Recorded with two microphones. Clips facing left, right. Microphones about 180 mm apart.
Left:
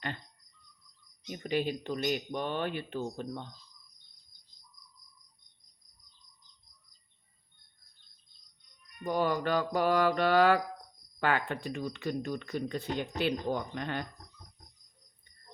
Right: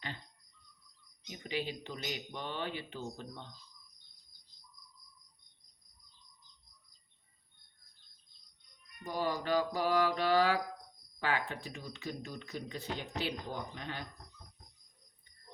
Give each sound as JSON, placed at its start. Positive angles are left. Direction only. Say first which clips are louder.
{"t": 1.3, "sound": "speech", "louder": "left 7 dB", "side_deg": 50}
{"t": 9.0, "sound": "speech", "louder": "left 5 dB", "side_deg": 60}